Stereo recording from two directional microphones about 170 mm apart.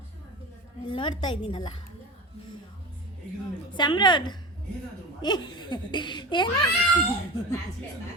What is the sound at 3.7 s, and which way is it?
Speech, 25° left (ahead or behind).